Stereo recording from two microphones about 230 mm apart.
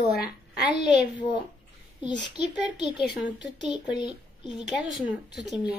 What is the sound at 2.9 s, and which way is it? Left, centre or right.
Speech, centre.